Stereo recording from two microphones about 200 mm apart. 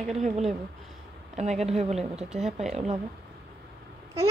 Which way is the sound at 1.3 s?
35° right (ahead or behind).